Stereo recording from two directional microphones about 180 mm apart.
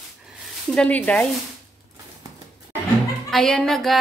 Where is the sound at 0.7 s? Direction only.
5° left (ahead or behind).